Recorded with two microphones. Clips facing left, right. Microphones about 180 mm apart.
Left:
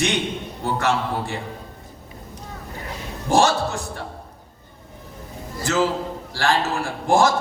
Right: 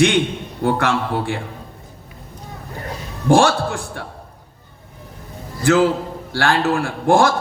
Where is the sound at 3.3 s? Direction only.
60° right (ahead or behind).